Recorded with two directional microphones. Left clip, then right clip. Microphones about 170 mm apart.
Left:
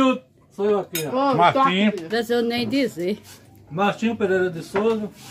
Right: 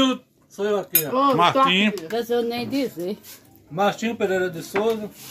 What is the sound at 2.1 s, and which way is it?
Speech, 15° left (ahead or behind).